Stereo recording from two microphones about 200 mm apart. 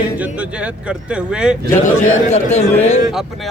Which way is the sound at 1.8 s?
35° left (ahead or behind).